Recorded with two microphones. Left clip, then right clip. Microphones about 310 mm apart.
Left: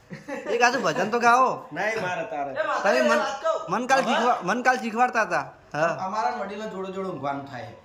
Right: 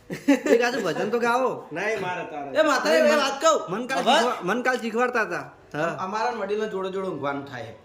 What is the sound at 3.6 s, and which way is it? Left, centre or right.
A man's voice, centre.